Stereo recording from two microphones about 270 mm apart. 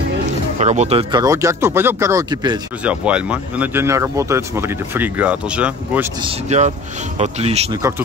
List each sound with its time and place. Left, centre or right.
0.6 s speech: right; by 6.0 s centre
6.2 s a man's voice: right